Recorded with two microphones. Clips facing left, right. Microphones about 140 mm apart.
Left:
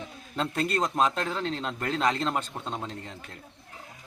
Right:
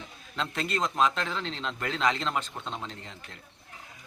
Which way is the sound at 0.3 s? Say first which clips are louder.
Left 3 dB; 45° left (ahead or behind).